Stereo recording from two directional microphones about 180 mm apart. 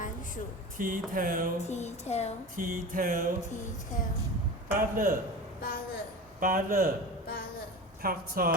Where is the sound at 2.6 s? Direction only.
50° right (ahead or behind).